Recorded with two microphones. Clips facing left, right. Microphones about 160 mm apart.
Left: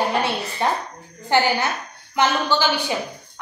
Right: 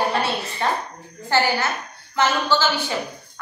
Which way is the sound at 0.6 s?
15° left (ahead or behind).